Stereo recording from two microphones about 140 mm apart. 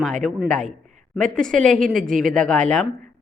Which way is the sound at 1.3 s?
5° left (ahead or behind).